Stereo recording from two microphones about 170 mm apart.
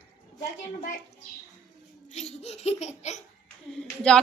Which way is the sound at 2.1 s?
40° left (ahead or behind).